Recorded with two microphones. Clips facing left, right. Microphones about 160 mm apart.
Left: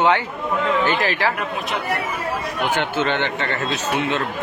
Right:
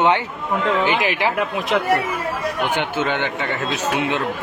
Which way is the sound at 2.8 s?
10° right (ahead or behind).